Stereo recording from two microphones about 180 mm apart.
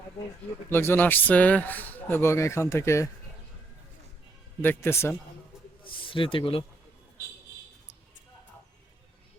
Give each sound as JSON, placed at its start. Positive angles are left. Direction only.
{"t": 0.7, "sound": "speech", "side_deg": 15}
{"t": 4.6, "sound": "speech", "side_deg": 10}
{"t": 5.8, "sound": "a man's voice", "side_deg": 30}